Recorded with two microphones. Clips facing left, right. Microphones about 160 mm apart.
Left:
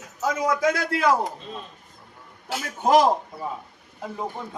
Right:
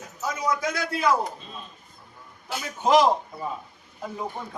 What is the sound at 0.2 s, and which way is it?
Speech, 90° left.